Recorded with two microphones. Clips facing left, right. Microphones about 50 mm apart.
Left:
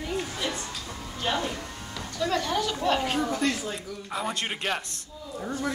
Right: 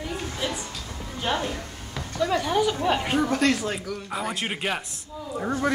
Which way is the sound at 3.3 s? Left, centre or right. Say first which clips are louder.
Right 5 dB; right.